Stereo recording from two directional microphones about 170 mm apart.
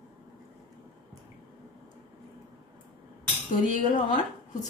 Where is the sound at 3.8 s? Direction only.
50° left (ahead or behind).